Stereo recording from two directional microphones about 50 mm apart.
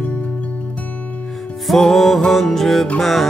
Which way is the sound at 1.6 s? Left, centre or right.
Centre.